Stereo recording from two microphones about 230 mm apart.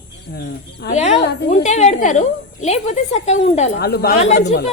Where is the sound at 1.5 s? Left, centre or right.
Left.